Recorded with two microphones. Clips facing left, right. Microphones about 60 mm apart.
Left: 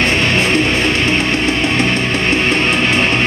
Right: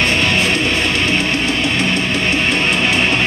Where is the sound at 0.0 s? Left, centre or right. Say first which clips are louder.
Left 1 dB; left.